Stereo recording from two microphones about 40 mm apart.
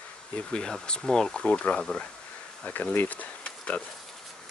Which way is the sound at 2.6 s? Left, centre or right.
Left.